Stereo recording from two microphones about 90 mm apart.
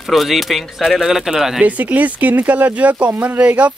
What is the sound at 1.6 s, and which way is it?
Speech, 15° right (ahead or behind).